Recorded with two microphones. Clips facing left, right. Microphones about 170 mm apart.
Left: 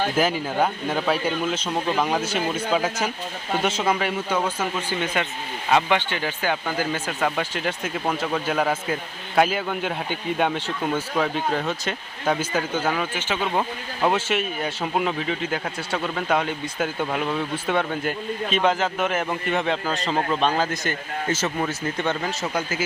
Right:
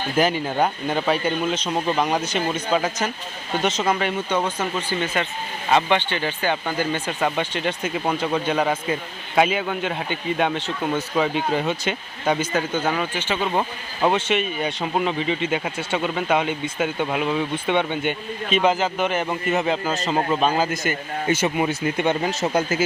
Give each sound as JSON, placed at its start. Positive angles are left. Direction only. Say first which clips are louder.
{"t": 0.2, "sound": "speech", "louder": "right 4 dB", "side_deg": 0}
{"t": 6.1, "sound": "speech", "louder": "right 2 dB", "side_deg": 5}